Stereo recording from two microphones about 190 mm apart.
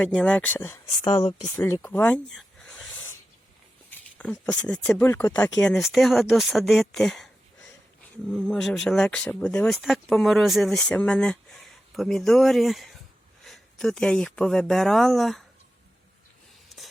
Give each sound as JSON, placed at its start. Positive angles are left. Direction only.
{"t": 0.0, "sound": "speech", "side_deg": 5}
{"t": 1.5, "sound": "a sound", "side_deg": 10}
{"t": 3.9, "sound": "speech", "side_deg": 5}
{"t": 8.4, "sound": "speech", "side_deg": 0}